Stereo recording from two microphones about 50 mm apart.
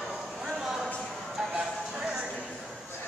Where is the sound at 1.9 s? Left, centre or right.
Right.